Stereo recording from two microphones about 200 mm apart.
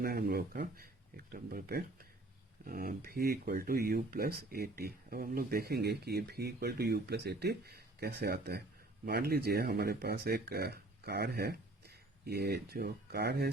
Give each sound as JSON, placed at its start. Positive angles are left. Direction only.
{"t": 0.0, "sound": "speech", "side_deg": -50}